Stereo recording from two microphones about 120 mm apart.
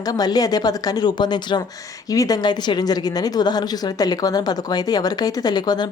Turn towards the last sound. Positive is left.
turn(degrees=35)  # may be behind; listen again after turning